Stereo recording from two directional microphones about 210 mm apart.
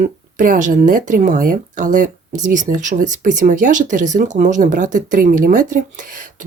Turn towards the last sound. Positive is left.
turn(degrees=-40)  # may be behind; listen again after turning